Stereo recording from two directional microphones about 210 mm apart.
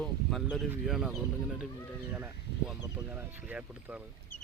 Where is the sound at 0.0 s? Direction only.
Centre (ahead or behind).